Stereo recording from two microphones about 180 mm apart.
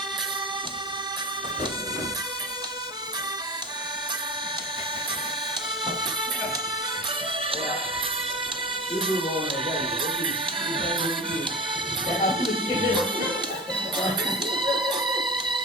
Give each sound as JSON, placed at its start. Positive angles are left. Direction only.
{"t": 9.0, "sound": "music", "side_deg": -30}